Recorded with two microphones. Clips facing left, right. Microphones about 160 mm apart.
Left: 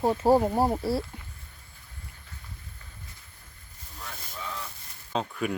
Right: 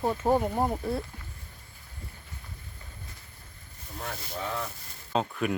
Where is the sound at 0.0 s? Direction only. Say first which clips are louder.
Left 4 dB; 25° left (ahead or behind).